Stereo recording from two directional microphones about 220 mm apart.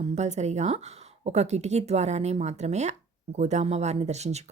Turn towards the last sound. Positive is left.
turn(degrees=-30)  # may be behind; listen again after turning